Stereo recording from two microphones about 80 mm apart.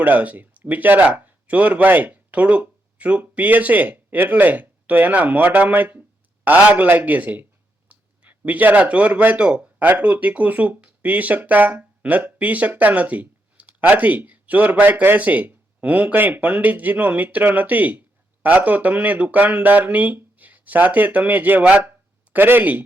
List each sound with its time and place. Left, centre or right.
0.0 s a man's voice: right